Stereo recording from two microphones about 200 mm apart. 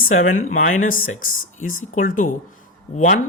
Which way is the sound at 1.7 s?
40° left (ahead or behind).